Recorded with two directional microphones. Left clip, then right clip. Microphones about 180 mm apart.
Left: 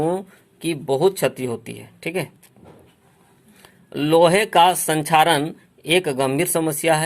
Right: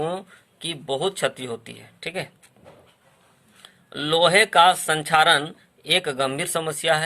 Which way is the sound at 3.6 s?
20° left (ahead or behind).